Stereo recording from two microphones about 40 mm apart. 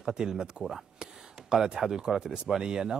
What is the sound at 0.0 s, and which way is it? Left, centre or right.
A man's voice, centre.